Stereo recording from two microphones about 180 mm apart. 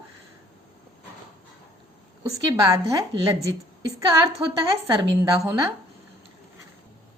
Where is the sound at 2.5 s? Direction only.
20° right (ahead or behind).